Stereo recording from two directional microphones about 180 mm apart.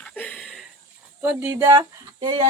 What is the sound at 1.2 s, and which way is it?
Speech, 10° right (ahead or behind).